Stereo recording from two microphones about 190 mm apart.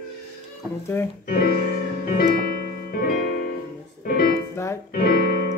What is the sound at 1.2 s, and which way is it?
Music, 50° left (ahead or behind).